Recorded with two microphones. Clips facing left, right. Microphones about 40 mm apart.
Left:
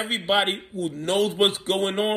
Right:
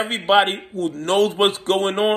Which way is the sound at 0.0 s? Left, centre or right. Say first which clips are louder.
Right 6 dB; right.